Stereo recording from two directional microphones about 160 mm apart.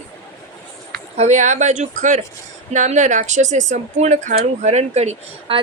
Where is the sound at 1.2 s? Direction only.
50° right (ahead or behind).